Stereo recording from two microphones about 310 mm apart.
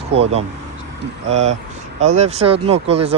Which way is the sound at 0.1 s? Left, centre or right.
Centre.